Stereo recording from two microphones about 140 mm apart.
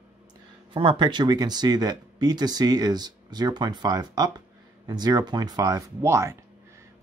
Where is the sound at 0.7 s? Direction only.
40° right (ahead or behind).